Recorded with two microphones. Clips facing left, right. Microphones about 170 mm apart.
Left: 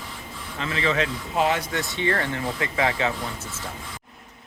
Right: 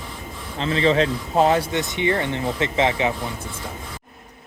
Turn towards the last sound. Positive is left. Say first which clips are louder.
# right 4 dB
turn(degrees=-20)  # may be behind; listen again after turning